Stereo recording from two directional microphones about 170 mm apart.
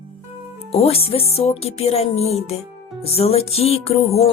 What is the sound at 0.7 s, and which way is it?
Speech, 35° left (ahead or behind).